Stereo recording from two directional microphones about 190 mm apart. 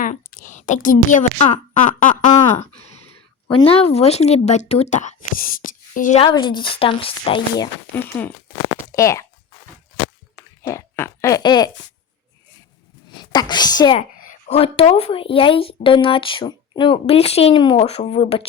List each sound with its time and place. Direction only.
0.0 s a woman's voice: 45° left (ahead or behind)
3.5 s speech: 30° left (ahead or behind)
6.2 s a woman's voice: 25° left (ahead or behind)
7.9 s speech: 10° left (ahead or behind)
10.7 s a sound: 15° left (ahead or behind)
13.1 s a woman's voice: 20° left (ahead or behind)
14.2 s a woman's voice: 40° left (ahead or behind)